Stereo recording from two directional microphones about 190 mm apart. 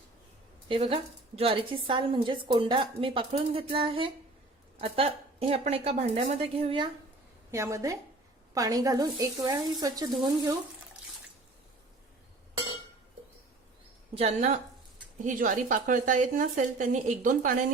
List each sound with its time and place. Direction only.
0.7 s a woman's voice: 30° right (ahead or behind)
7.5 s a woman's voice: 15° right (ahead or behind)
14.2 s a woman's voice: 35° right (ahead or behind)